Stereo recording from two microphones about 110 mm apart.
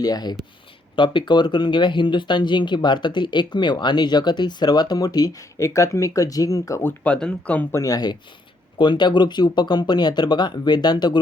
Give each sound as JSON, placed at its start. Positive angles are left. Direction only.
{"t": 0.0, "sound": "speech", "side_deg": 35}
{"t": 7.0, "sound": "speech", "side_deg": 10}
{"t": 7.7, "sound": "speech", "side_deg": 30}